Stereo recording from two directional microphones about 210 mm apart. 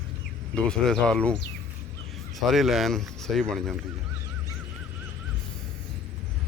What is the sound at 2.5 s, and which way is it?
Speech, centre (ahead or behind).